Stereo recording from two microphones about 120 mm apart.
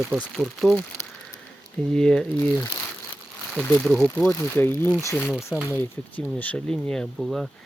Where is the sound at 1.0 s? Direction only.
25° left (ahead or behind).